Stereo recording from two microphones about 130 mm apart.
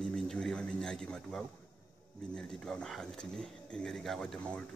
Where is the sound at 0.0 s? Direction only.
5° left (ahead or behind).